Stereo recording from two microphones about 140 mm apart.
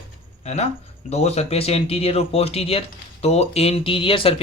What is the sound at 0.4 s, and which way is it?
Speech, 50° left (ahead or behind).